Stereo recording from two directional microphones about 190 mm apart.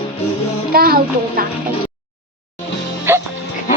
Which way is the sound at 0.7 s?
50° right (ahead or behind).